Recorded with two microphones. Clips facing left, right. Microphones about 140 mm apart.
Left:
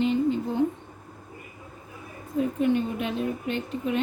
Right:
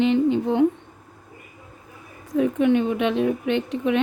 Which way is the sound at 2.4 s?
75° right (ahead or behind).